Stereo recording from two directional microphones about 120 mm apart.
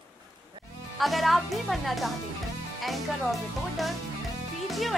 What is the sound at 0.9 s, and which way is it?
Speech, centre (ahead or behind).